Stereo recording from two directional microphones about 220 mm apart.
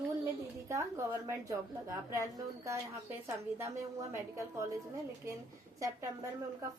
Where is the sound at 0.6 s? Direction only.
15° right (ahead or behind).